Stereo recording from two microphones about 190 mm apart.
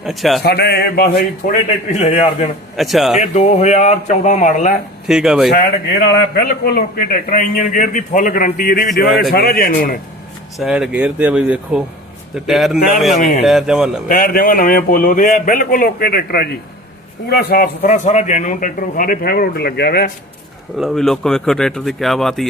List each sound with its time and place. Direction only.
0.0 s speech: centre (ahead or behind)
0.4 s speech: 60° left (ahead or behind)
2.0 s speech: 35° left (ahead or behind)
2.7 s speech: centre (ahead or behind)
3.2 s speech: 35° left (ahead or behind)
5.0 s speech: 5° right (ahead or behind)
5.5 s a man's voice: 55° left (ahead or behind)
10.6 s speech: 5° right (ahead or behind)
14.1 s a man's voice: 45° left (ahead or behind)
17.8 s a man's voice: 40° left (ahead or behind); by 20.1 s 55° left (ahead or behind)
20.7 s speech: centre (ahead or behind)